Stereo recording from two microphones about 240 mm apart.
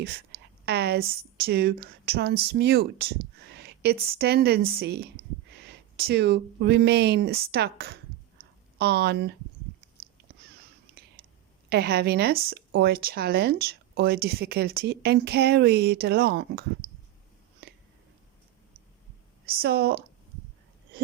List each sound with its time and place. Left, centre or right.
0.0 s a sound: right
1.1 s speech: right
11.7 s speech: right
19.5 s speech: right